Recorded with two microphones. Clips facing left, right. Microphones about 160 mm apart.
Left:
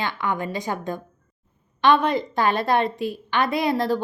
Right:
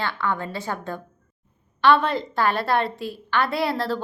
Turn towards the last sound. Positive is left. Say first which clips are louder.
# left 3 dB
turn(degrees=15)  # may be behind; listen again after turning